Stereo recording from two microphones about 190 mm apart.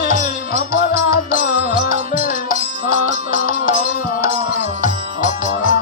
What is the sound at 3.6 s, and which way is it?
Music, 45° left (ahead or behind).